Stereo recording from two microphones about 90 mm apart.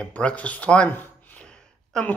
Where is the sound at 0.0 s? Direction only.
15° left (ahead or behind).